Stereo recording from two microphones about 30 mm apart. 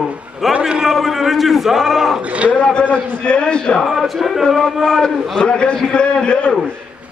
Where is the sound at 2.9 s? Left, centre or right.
Left.